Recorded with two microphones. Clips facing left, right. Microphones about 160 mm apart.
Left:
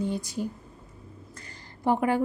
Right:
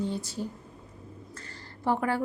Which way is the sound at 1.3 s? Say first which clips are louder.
Right 2 dB; 15° left (ahead or behind).